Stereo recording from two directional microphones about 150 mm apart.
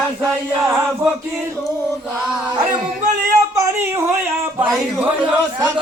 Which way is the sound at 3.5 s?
20° right (ahead or behind).